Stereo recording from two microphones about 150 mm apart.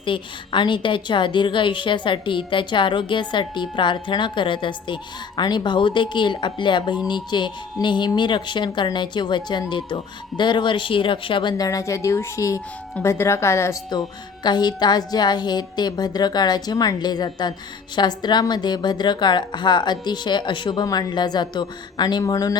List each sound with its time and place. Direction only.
0.0 s speech: 35° left (ahead or behind); by 13.7 s 20° left (ahead or behind)
14.4 s a woman's voice: 30° left (ahead or behind)